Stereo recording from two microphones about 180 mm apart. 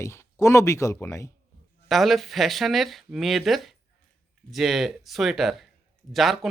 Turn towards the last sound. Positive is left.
turn(degrees=0)  # may be behind; listen again after turning